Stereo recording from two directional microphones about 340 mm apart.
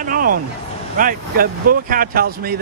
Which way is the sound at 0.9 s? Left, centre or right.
Right.